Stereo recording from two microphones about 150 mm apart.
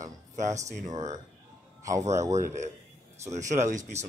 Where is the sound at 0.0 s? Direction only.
55° right (ahead or behind).